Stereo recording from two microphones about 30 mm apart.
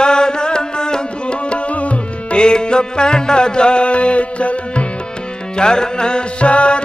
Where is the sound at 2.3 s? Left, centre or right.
Left.